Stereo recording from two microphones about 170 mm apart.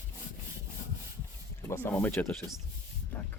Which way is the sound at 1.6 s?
15° left (ahead or behind).